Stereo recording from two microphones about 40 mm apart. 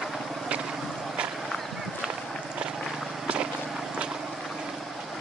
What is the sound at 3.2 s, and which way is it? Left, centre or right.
Vehicle, right.